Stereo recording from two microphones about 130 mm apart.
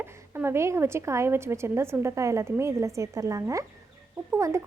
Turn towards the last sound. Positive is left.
turn(degrees=-20)  # may be behind; listen again after turning